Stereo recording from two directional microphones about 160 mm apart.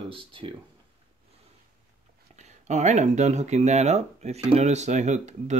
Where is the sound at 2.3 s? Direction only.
45° right (ahead or behind).